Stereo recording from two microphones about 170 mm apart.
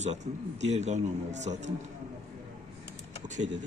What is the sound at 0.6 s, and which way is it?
Speech, 40° right (ahead or behind).